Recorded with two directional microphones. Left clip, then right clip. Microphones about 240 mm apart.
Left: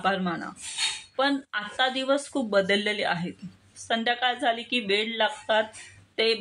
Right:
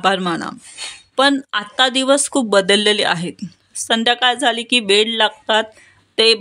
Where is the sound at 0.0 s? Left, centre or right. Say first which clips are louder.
Right 10 dB; right.